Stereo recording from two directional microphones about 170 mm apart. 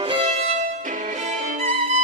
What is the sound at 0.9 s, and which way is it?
Music, 45° right (ahead or behind).